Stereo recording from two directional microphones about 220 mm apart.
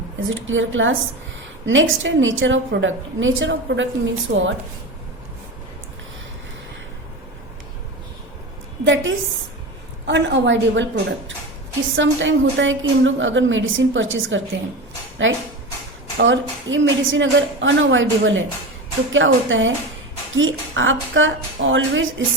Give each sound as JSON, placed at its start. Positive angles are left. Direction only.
{"t": 0.3, "sound": "a woman's voice", "side_deg": -60}
{"t": 8.8, "sound": "a woman's voice", "side_deg": -60}
{"t": 11.9, "sound": "a woman's voice", "side_deg": -60}